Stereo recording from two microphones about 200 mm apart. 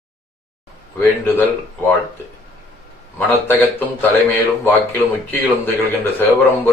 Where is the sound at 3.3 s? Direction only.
10° left (ahead or behind).